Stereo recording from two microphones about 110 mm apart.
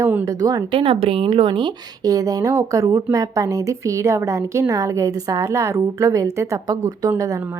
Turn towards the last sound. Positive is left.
turn(degrees=-30)  # may be behind; listen again after turning